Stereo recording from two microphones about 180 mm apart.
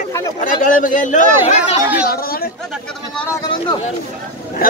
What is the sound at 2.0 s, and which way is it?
Speech, 55° left (ahead or behind).